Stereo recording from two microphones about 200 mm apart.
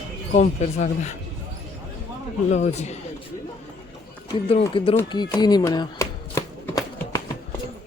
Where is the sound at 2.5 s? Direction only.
35° left (ahead or behind).